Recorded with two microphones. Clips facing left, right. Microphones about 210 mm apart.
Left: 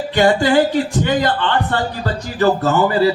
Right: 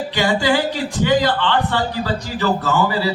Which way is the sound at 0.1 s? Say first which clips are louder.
Left 5 dB; 50° left (ahead or behind).